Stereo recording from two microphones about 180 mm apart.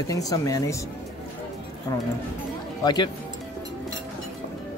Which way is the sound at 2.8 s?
25° left (ahead or behind).